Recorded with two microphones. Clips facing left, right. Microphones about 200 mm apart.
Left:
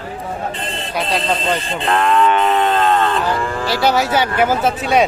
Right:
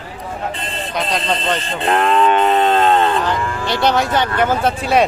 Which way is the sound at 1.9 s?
20° right (ahead or behind).